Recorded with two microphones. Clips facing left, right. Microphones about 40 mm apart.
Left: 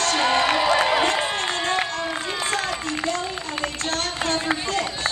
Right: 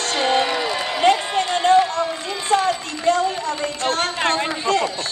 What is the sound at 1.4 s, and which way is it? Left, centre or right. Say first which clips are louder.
Run: right 8 dB; left.